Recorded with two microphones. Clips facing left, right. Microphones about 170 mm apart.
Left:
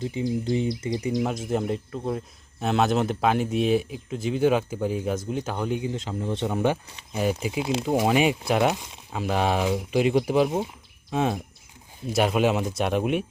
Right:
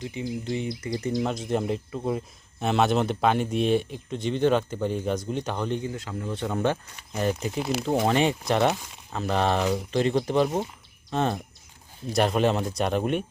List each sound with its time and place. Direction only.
0.4 s speech: 30° left (ahead or behind)
0.8 s speech: 20° left (ahead or behind)
1.2 s speech: 5° left (ahead or behind)
5.9 s speech: 20° left (ahead or behind); by 13.2 s centre (ahead or behind)